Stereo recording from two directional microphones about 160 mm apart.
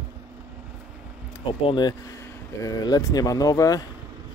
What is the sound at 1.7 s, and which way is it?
Speech, 25° left (ahead or behind).